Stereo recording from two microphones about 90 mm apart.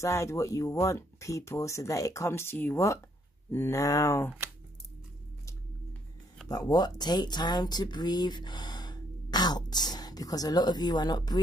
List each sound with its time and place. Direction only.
0.0 s speech: 30° left (ahead or behind)
6.7 s speech: 50° left (ahead or behind)